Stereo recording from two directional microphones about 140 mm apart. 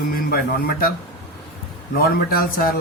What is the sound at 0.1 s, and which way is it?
Speech, 90° left.